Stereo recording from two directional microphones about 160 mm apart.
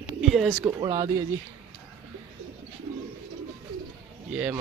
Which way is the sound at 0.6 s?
25° right (ahead or behind).